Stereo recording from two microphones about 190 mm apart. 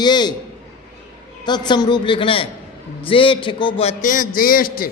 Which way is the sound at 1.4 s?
25° left (ahead or behind).